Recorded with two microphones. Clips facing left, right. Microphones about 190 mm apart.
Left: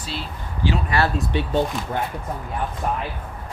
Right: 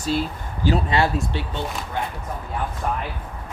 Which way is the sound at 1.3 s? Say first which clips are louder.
Left 5 dB; 15° left (ahead or behind).